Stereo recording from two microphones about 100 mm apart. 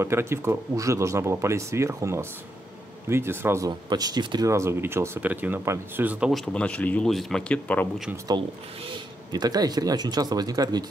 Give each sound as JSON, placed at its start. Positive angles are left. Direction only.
{"t": 0.0, "sound": "speech", "side_deg": -25}
{"t": 3.6, "sound": "speech", "side_deg": -40}
{"t": 4.5, "sound": "speech", "side_deg": -30}
{"t": 6.3, "sound": "speech", "side_deg": 10}
{"t": 7.1, "sound": "speech", "side_deg": 0}
{"t": 8.3, "sound": "speech", "side_deg": -40}